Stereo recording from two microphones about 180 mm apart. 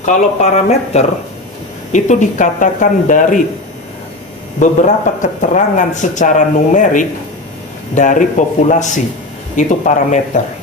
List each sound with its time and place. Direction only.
0.0 s speech: 40° left (ahead or behind)
4.6 s speech: 45° left (ahead or behind)